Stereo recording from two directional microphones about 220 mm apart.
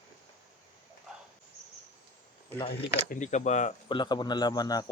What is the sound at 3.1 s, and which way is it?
Speech, 35° left (ahead or behind).